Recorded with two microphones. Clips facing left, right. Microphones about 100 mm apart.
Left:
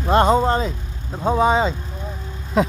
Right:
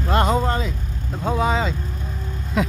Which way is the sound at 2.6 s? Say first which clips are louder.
Left 4 dB; 30° left (ahead or behind).